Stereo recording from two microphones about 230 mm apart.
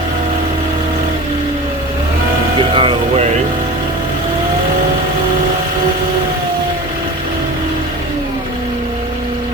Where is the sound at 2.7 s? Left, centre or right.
Right.